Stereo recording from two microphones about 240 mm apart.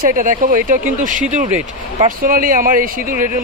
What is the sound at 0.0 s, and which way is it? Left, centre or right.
Speech, right.